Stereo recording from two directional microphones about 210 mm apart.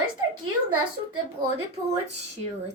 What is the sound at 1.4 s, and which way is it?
Speech, 20° right (ahead or behind).